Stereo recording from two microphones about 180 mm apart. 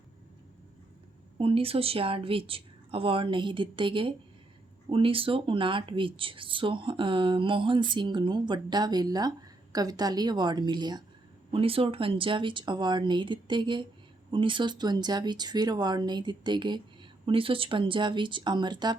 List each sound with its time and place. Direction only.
1.4 s a woman's voice: 30° right (ahead or behind)